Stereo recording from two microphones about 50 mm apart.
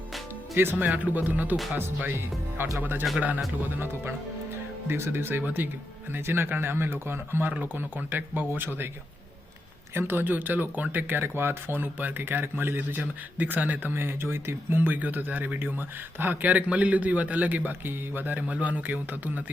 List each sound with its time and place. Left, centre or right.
0.5 s speech: right
0.9 s speech: right
3.2 s speech: right
4.9 s speech: right
5.6 s speech: right
7.6 s speech: right
9.9 s speech: right
13.9 s speech: right
14.8 s speech: right
17.7 s speech: right